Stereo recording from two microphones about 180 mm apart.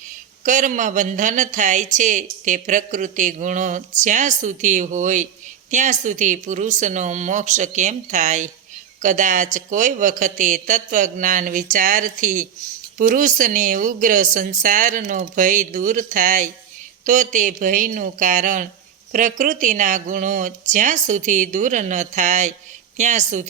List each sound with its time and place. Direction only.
0.4 s a woman's voice: 45° right (ahead or behind)